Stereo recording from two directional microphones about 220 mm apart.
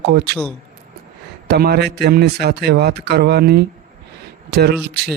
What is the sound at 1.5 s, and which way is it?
A man's voice, 45° right (ahead or behind).